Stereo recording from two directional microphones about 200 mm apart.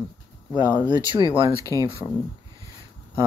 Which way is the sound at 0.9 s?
25° right (ahead or behind).